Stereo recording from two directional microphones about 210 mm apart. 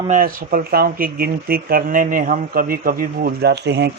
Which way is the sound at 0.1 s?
40° right (ahead or behind).